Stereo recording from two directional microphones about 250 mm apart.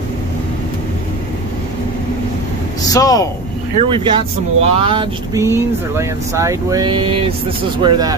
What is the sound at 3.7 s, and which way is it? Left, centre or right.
Speech, centre.